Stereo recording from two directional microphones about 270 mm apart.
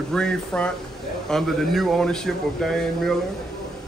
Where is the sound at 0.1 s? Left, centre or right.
Centre.